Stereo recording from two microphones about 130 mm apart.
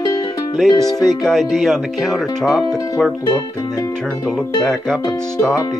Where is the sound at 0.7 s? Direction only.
30° left (ahead or behind).